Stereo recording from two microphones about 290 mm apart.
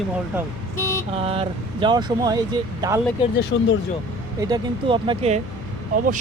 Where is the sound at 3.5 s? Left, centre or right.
Left.